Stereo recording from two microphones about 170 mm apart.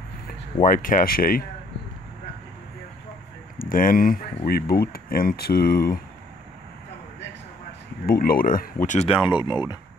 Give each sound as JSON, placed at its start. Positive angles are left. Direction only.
{"t": 0.6, "sound": "speech", "side_deg": 55}
{"t": 3.5, "sound": "speech", "side_deg": 55}
{"t": 4.5, "sound": "speech", "side_deg": 65}
{"t": 8.1, "sound": "speech", "side_deg": 60}